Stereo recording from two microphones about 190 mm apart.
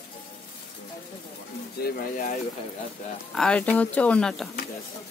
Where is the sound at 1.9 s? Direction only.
45° left (ahead or behind).